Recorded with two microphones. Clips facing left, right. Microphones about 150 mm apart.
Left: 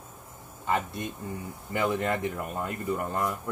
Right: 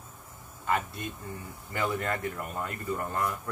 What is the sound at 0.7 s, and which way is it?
Speech, 20° left (ahead or behind).